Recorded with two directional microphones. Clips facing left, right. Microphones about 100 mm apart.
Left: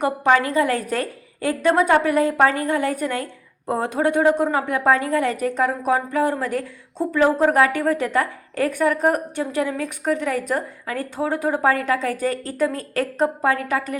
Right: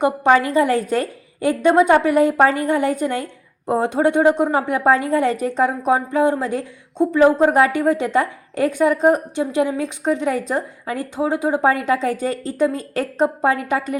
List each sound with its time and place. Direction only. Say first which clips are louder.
0.0 s a woman's voice: right 3 dB; 30° right (ahead or behind)